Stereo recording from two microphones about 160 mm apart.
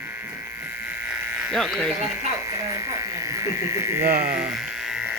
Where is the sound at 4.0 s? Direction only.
75° right (ahead or behind).